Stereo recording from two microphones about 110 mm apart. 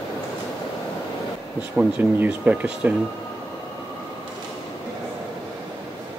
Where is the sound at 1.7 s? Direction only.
15° right (ahead or behind).